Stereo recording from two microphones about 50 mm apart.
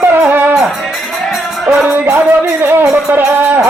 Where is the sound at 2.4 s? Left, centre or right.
Right.